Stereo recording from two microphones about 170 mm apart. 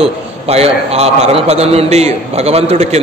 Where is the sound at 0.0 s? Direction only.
35° right (ahead or behind).